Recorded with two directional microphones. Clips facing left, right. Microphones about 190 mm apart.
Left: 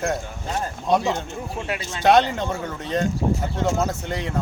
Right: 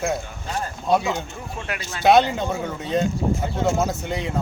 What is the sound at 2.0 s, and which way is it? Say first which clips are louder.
Speech: right 1 dB; 10° right (ahead or behind).